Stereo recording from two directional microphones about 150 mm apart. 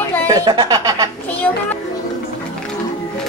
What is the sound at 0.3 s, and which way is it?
Speech, 25° right (ahead or behind).